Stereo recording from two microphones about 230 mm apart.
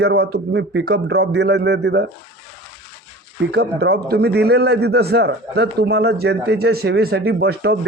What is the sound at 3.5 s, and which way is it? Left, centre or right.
Speech, right.